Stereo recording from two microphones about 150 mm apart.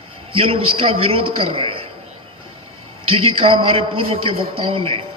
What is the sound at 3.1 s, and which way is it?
A man's voice, 40° right (ahead or behind).